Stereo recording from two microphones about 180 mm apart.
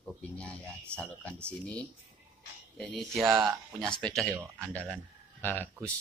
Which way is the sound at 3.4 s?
20° right (ahead or behind).